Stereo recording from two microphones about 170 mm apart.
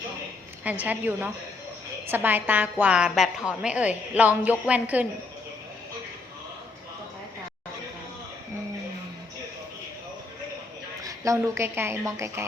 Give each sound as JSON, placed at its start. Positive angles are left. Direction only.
{"t": 0.6, "sound": "a woman's voice", "side_deg": -10}
{"t": 11.0, "sound": "a woman's voice", "side_deg": -20}